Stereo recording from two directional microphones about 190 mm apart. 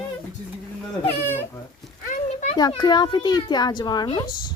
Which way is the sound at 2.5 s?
20° left (ahead or behind).